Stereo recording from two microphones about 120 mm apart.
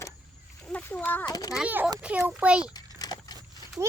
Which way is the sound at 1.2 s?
35° left (ahead or behind).